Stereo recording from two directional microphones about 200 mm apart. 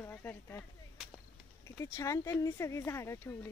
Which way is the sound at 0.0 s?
10° left (ahead or behind).